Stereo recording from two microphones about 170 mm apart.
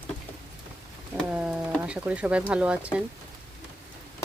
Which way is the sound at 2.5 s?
5° right (ahead or behind).